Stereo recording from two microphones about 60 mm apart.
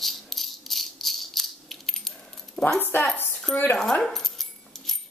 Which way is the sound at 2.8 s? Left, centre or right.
Left.